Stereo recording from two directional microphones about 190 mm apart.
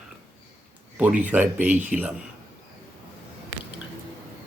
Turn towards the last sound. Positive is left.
turn(degrees=-75)  # may be behind; listen again after turning